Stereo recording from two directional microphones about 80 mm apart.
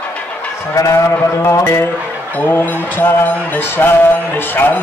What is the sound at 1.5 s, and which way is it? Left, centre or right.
Speech, left.